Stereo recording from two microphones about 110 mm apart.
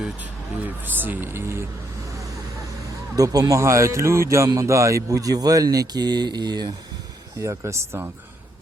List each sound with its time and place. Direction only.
0.0 s speech: 15° right (ahead or behind)
3.2 s speech: 35° right (ahead or behind)
7.4 s speech: 25° right (ahead or behind)